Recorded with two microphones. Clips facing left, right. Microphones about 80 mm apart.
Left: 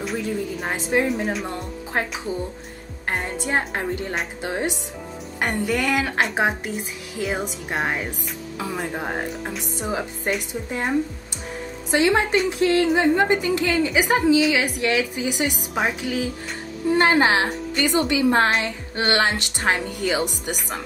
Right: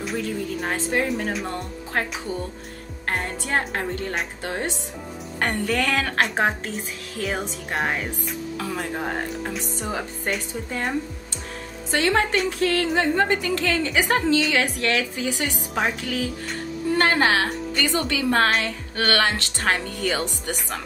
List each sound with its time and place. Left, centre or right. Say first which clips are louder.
0.0 s speech: left 1 dB; centre
0.7 s speech: left 3 dB; centre
3.4 s speech: left 1 dB; centre
11.9 s speech: left 2 dB; centre